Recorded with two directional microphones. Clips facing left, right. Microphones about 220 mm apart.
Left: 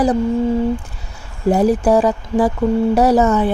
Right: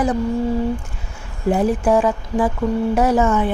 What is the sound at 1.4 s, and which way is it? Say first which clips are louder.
Speech: left 3 dB; 40° left (ahead or behind).